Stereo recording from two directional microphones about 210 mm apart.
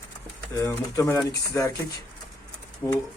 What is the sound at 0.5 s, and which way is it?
Speech, 15° left (ahead or behind).